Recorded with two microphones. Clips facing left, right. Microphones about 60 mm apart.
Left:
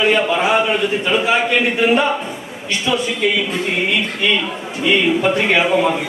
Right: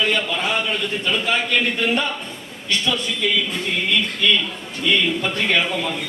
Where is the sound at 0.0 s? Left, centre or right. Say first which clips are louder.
Left 6 dB; centre.